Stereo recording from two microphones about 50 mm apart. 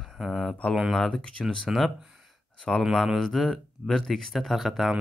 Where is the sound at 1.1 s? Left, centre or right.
Centre.